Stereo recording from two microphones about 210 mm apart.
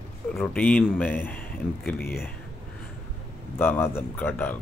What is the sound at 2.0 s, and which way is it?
Speech, 45° left (ahead or behind).